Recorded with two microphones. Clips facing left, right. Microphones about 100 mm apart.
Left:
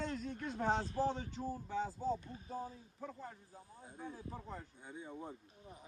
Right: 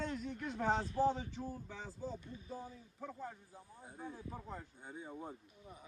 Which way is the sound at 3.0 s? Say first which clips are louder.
Right 2 dB; 5° right (ahead or behind).